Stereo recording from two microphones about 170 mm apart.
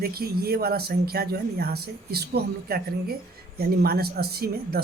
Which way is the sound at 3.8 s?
65° right (ahead or behind).